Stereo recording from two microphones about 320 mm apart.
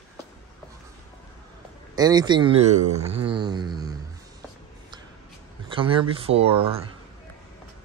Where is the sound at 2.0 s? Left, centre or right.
Centre.